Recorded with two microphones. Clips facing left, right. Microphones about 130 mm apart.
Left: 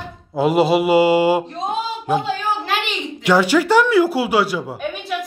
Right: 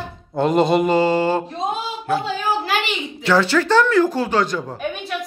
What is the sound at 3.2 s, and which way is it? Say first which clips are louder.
A woman's voice: left 2 dB; 15° left (ahead or behind).